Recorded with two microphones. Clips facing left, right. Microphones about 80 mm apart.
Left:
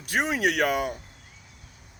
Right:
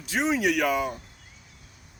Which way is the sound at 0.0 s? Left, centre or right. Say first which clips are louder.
Even; left.